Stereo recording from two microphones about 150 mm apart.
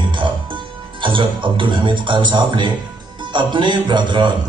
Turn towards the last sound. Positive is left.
turn(degrees=-30)  # may be behind; listen again after turning